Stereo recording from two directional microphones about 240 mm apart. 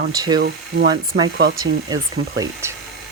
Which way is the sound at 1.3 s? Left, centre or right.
Right.